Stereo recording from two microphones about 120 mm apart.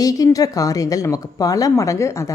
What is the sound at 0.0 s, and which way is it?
Speech, 30° left (ahead or behind).